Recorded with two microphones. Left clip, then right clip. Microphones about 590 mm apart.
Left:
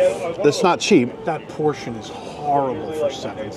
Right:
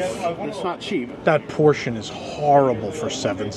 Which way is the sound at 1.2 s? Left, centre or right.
Centre.